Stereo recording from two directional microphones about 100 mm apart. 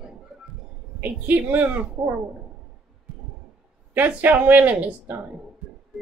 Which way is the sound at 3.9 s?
15° right (ahead or behind).